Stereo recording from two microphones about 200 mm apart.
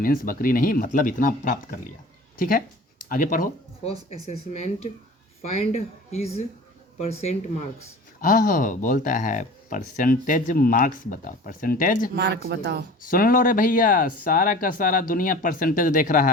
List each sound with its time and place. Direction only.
0.0 s speech: 45° left (ahead or behind)
12.1 s speech: 55° right (ahead or behind)
13.1 s speech: 45° left (ahead or behind)